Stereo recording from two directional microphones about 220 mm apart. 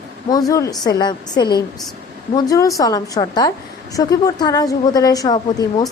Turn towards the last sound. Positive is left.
turn(degrees=15)  # may be behind; listen again after turning